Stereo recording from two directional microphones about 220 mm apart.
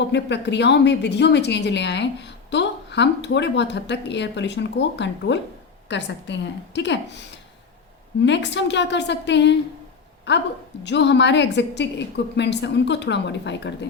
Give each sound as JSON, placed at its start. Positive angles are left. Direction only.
{"t": 0.0, "sound": "a woman's voice", "side_deg": 50}
{"t": 8.2, "sound": "a woman's voice", "side_deg": 55}